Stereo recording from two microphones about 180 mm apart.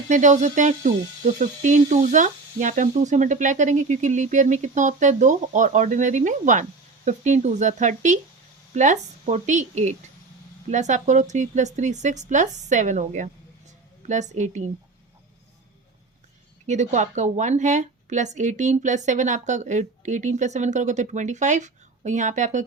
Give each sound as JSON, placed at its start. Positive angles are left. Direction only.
{"t": 0.1, "sound": "a woman's voice", "side_deg": -45}
{"t": 16.6, "sound": "a woman's voice", "side_deg": -40}